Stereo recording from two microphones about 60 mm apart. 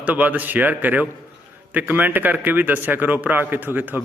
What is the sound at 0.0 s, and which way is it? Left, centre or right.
A man's voice, right.